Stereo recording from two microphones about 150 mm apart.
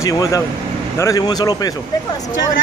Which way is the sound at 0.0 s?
20° left (ahead or behind).